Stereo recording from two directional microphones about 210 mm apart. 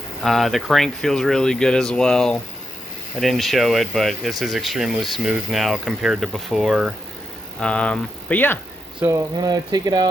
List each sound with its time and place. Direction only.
0.2 s speech: centre (ahead or behind)
9.0 s speech: 15° right (ahead or behind)